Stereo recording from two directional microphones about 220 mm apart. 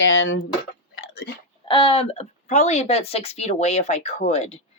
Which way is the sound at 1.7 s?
20° left (ahead or behind).